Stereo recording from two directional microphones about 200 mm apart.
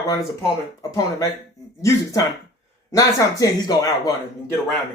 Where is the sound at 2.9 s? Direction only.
15° left (ahead or behind).